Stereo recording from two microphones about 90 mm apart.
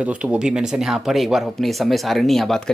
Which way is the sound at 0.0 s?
10° right (ahead or behind).